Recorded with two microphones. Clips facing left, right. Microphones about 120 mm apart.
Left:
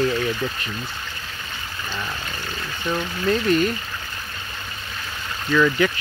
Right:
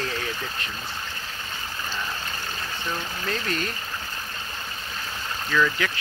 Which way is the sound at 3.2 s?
10° left (ahead or behind).